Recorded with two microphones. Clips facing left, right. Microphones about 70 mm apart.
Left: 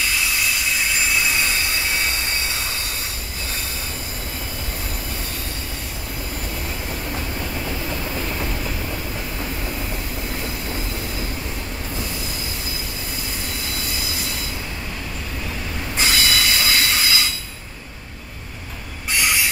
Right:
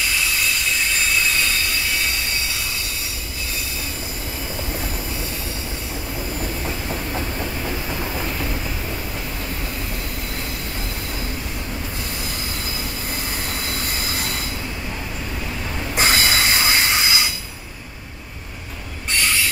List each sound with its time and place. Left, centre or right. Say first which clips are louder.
0.9 s train: even; centre
7.9 s train: right 1 dB; centre
14.0 s train: right 2 dB; right
16.0 s train: right 2 dB; right
19.1 s train wheels squealing: even; centre